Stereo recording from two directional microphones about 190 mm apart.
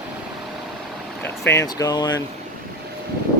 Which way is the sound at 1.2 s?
15° left (ahead or behind).